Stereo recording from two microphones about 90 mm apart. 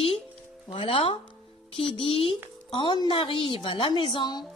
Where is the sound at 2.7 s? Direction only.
50° left (ahead or behind).